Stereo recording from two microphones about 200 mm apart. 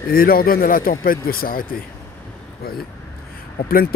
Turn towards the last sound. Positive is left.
turn(degrees=50)  # may be behind; listen again after turning